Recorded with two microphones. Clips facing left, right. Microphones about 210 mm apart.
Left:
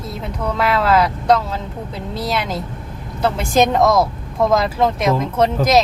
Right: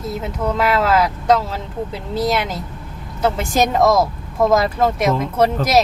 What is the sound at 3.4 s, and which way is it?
Speech, centre (ahead or behind).